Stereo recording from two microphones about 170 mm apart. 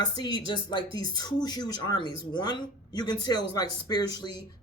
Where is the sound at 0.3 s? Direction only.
25° left (ahead or behind).